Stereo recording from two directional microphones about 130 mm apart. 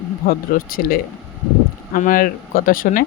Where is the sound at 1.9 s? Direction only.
90° left.